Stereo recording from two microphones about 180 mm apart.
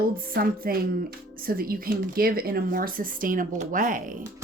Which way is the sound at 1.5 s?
55° right (ahead or behind).